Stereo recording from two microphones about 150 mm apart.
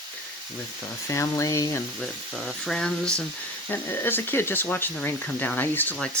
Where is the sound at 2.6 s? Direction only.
5° left (ahead or behind).